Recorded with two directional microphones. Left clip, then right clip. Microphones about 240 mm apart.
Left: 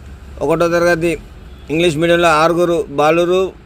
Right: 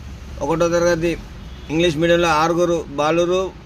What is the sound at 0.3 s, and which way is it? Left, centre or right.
A man's voice, centre.